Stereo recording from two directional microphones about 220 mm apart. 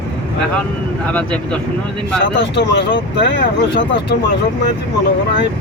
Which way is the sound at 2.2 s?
55° left (ahead or behind).